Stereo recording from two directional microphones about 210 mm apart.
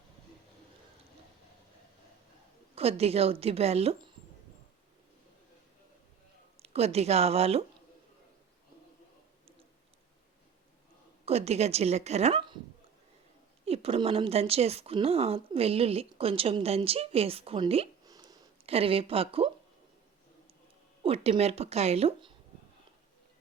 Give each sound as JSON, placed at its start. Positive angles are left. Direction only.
{"t": 2.7, "sound": "a woman's voice", "side_deg": -30}
{"t": 6.6, "sound": "a woman's voice", "side_deg": -30}
{"t": 11.3, "sound": "a woman's voice", "side_deg": -30}
{"t": 13.7, "sound": "a woman's voice", "side_deg": -30}
{"t": 21.0, "sound": "a woman's voice", "side_deg": -30}